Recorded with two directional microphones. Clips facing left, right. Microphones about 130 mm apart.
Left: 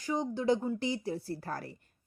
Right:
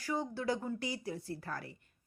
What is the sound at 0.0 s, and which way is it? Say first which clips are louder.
Speech: left 4 dB; 20° left (ahead or behind).